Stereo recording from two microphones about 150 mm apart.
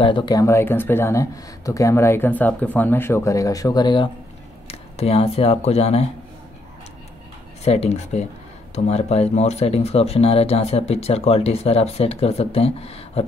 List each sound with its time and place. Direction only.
0.0 s speech: 30° left (ahead or behind)
4.6 s speech: 40° left (ahead or behind)
7.6 s speech: 45° left (ahead or behind)